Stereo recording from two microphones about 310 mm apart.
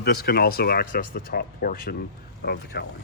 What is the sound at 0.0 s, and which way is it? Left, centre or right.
Speech, left.